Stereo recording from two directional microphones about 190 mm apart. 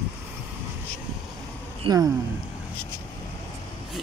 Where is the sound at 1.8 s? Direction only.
20° right (ahead or behind).